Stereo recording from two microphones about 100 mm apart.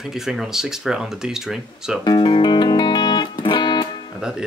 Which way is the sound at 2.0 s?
50° left (ahead or behind).